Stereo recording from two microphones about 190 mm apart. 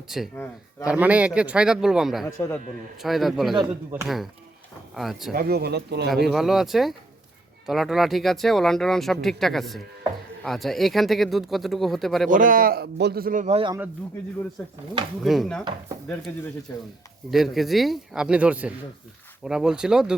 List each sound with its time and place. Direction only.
0.3 s a man's voice: 10° left (ahead or behind)
0.9 s speech: 5° right (ahead or behind)
2.2 s a man's voice: 15° left (ahead or behind)
3.0 s speech: centre (ahead or behind)
5.3 s speech: 55° right (ahead or behind)
6.2 s speech: centre (ahead or behind)
12.3 s a man's voice: 45° right (ahead or behind)
14.6 s a man's voice: 10° left (ahead or behind)
15.2 s a man's voice: centre (ahead or behind); by 16.8 s 15° left (ahead or behind)
17.3 s speech: centre (ahead or behind)